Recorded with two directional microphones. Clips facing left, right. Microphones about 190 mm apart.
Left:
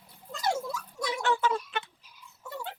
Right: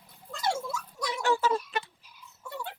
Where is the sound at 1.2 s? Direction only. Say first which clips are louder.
Right 2 dB; 10° right (ahead or behind).